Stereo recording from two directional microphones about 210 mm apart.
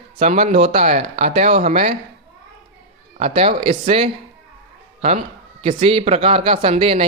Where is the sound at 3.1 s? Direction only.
30° right (ahead or behind).